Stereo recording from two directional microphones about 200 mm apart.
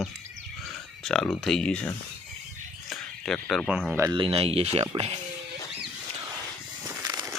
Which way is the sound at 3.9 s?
20° right (ahead or behind).